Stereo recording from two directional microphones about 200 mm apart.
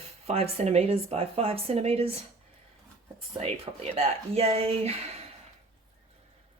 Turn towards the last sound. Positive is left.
turn(degrees=-30)  # may be behind; listen again after turning